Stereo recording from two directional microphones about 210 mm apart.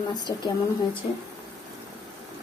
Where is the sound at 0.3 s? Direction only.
20° left (ahead or behind).